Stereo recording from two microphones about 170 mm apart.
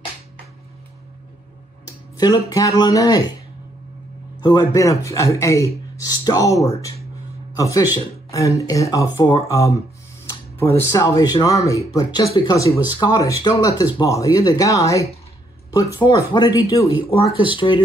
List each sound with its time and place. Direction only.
1.9 s a sound: 20° left (ahead or behind)
2.5 s speech: 20° left (ahead or behind)
4.4 s speech: 25° left (ahead or behind)
17.5 s speech: 30° left (ahead or behind)